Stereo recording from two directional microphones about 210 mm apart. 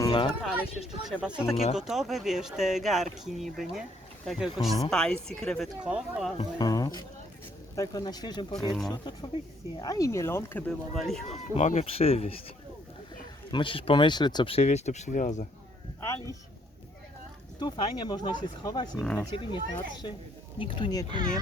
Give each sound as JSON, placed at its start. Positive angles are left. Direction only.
{"t": 0.0, "sound": "music", "side_deg": 20}
{"t": 0.4, "sound": "speech", "side_deg": 0}
{"t": 6.3, "sound": "speech", "side_deg": 20}
{"t": 11.5, "sound": "speech", "side_deg": 35}
{"t": 13.5, "sound": "speech", "side_deg": 25}
{"t": 16.0, "sound": "speech", "side_deg": 15}
{"t": 17.6, "sound": "speech", "side_deg": 20}
{"t": 18.9, "sound": "speech", "side_deg": 5}
{"t": 19.4, "sound": "speech", "side_deg": 25}